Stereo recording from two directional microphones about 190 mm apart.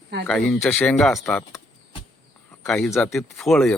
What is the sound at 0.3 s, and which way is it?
Speech, 5° left (ahead or behind).